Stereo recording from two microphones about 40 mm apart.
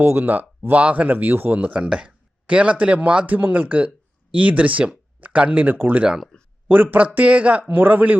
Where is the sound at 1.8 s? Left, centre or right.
Right.